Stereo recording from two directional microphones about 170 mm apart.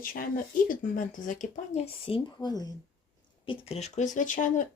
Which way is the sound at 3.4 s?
35° left (ahead or behind).